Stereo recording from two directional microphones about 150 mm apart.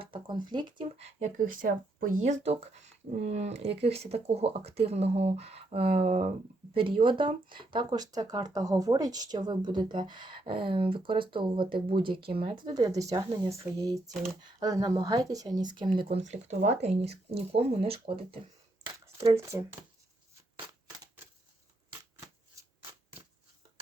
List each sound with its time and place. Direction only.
0.0 s speech: 35° right (ahead or behind)
1.4 s speech: 65° right (ahead or behind); by 6.0 s 40° right (ahead or behind)
6.0 s speech: 50° right (ahead or behind)
6.7 s speech: 35° right (ahead or behind)
19.0 s speech: 20° right (ahead or behind)